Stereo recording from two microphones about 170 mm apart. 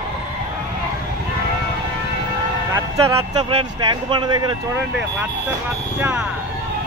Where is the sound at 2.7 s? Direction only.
20° right (ahead or behind).